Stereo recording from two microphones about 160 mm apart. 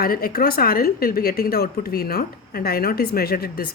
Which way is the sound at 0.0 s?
65° left (ahead or behind).